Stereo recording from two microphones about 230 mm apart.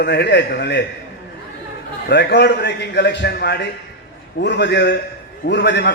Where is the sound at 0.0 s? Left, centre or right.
Left.